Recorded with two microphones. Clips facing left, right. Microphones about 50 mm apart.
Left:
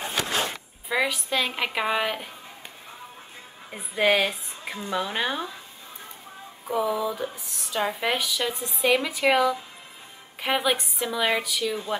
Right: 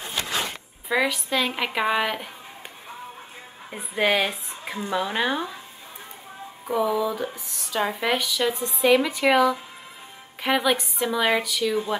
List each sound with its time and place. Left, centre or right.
0.0 s a sound: left
0.8 s speech: centre
3.7 s speech: centre
6.7 s speech: centre
11.0 s speech: centre
11.4 s speech: centre